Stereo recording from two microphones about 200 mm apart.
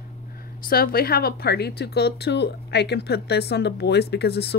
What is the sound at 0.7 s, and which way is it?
A woman's voice, 50° left (ahead or behind).